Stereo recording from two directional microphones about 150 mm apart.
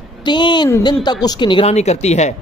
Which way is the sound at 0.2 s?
30° left (ahead or behind).